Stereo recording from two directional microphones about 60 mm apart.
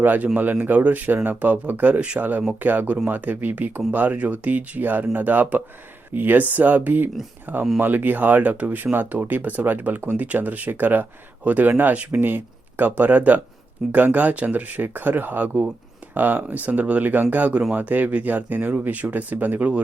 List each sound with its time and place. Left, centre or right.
0.0 s speech: right